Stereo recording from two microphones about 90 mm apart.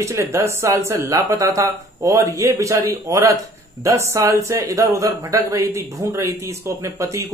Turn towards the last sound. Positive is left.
turn(degrees=-35)  # may be behind; listen again after turning